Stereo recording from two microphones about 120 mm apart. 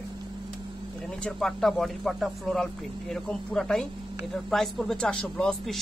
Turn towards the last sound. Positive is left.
turn(degrees=5)  # may be behind; listen again after turning